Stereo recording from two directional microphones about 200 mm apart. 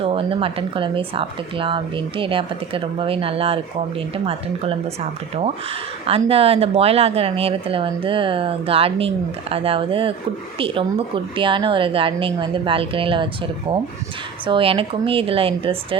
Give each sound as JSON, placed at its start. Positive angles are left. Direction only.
{"t": 0.0, "sound": "speech", "side_deg": -25}
{"t": 6.1, "sound": "speech", "side_deg": -30}